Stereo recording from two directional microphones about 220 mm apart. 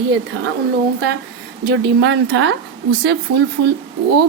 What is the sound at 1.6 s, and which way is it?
Speech, 55° right (ahead or behind).